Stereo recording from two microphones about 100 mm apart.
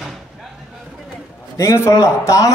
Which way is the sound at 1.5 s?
30° left (ahead or behind).